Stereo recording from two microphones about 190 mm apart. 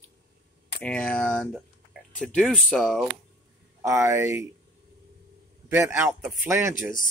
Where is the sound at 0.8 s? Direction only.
5° left (ahead or behind).